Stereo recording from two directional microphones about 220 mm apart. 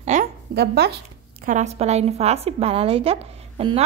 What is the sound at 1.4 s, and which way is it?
A woman's voice, 30° right (ahead or behind).